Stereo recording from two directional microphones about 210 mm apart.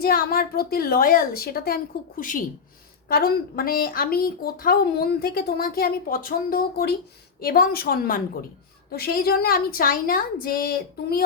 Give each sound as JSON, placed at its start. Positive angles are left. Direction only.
{"t": 0.0, "sound": "a woman's voice", "side_deg": 45}